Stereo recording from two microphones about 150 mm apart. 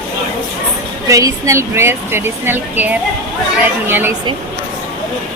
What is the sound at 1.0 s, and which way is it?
Speech, 20° right (ahead or behind).